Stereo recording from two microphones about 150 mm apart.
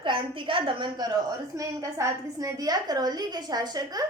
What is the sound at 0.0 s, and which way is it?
A woman's voice, 35° right (ahead or behind).